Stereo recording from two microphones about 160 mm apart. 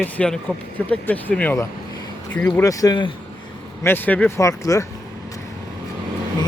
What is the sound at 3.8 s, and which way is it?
Speech, 10° left (ahead or behind).